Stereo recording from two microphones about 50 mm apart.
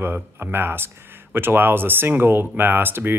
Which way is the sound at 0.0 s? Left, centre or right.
Right.